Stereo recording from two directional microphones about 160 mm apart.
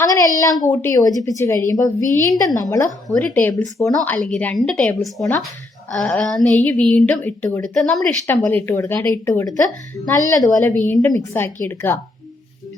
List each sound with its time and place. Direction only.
0.0 s speech: 20° left (ahead or behind)